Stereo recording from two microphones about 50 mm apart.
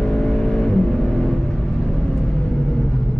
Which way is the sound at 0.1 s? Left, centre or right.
Centre.